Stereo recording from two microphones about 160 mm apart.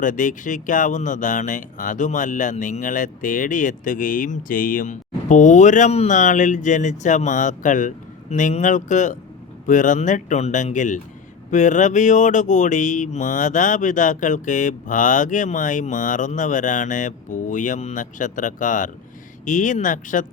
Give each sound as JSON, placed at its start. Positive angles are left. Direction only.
{"t": 0.0, "sound": "speech", "side_deg": 55}